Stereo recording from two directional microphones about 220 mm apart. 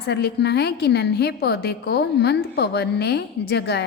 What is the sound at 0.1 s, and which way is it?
A woman's voice, 50° left (ahead or behind).